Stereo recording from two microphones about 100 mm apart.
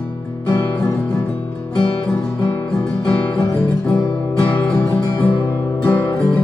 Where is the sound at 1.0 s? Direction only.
10° left (ahead or behind).